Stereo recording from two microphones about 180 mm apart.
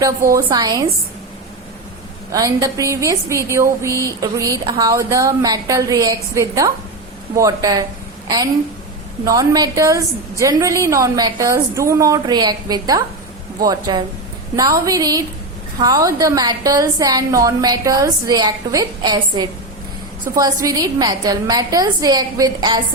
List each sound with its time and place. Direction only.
0.4 s a woman's voice: 20° right (ahead or behind)
2.3 s a woman's voice: 20° right (ahead or behind)
9.2 s a woman's voice: 20° right (ahead or behind)